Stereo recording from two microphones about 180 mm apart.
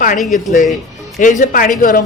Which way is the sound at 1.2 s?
45° left (ahead or behind).